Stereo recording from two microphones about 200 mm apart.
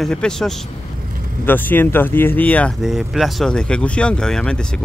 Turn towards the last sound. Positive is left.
turn(degrees=5)  # may be behind; listen again after turning